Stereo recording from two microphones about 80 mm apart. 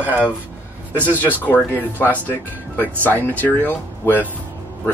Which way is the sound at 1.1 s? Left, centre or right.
Left.